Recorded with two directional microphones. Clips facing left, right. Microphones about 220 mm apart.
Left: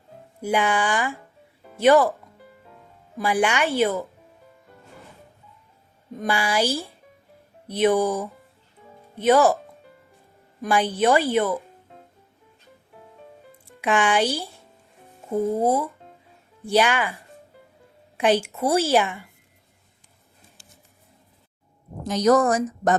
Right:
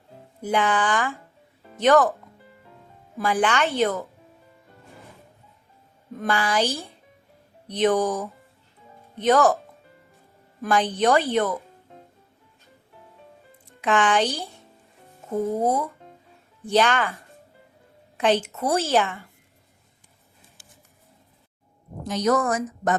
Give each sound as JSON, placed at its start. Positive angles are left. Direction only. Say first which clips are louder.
{"t": 0.4, "sound": "a woman's voice", "louder": "even", "side_deg": 10}
{"t": 3.2, "sound": "a woman's voice", "louder": "left 1 dB", "side_deg": 15}
{"t": 6.2, "sound": "a woman's voice", "louder": "even", "side_deg": 10}
{"t": 10.7, "sound": "a woman's voice", "louder": "left 1 dB", "side_deg": 10}
{"t": 13.8, "sound": "a woman's voice", "louder": "even", "side_deg": 10}
{"t": 15.3, "sound": "a woman's voice", "louder": "left 2 dB", "side_deg": 10}
{"t": 18.2, "sound": "a woman's voice", "louder": "left 1 dB", "side_deg": 10}
{"t": 22.0, "sound": "a woman's voice", "louder": "left 4 dB", "side_deg": 40}